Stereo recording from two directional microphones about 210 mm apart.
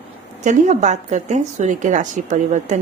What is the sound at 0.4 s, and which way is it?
A woman's voice, 35° right (ahead or behind).